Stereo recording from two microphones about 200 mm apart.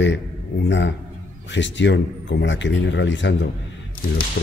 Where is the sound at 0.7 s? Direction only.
65° left (ahead or behind).